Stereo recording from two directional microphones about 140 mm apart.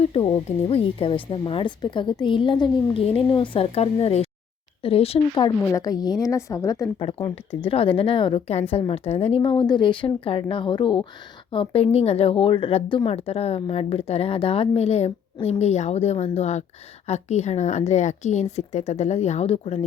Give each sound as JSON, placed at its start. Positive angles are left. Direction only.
{"t": 0.0, "sound": "a woman's voice", "side_deg": 45}
{"t": 5.7, "sound": "a woman's voice", "side_deg": 25}
{"t": 7.5, "sound": "a woman's voice", "side_deg": 40}